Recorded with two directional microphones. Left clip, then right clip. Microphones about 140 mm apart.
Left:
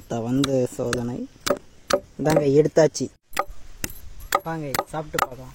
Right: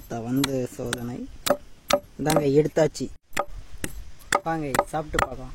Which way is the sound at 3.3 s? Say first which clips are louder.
Left 1 dB; 80° left.